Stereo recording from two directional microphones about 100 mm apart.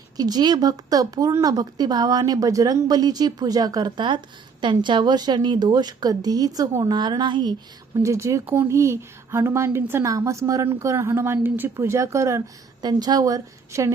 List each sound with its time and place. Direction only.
0.2 s a woman's voice: 40° right (ahead or behind)
8.0 s a woman's voice: 30° right (ahead or behind)
12.8 s a woman's voice: 40° right (ahead or behind)